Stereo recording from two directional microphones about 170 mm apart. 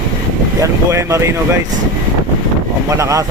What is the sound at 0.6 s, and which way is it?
Speech, 15° right (ahead or behind).